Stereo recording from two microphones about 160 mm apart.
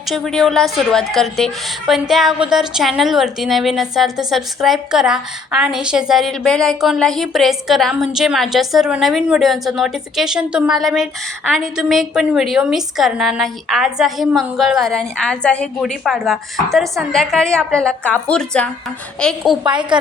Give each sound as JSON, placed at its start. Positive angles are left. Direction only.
{"t": 0.1, "sound": "a woman's voice", "side_deg": 0}
{"t": 19.7, "sound": "a woman's voice", "side_deg": -30}